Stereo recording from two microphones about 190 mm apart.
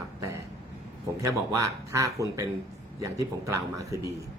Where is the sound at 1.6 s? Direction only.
15° right (ahead or behind).